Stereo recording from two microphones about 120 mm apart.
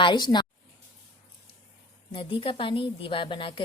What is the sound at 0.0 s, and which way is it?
Speech, 40° left (ahead or behind).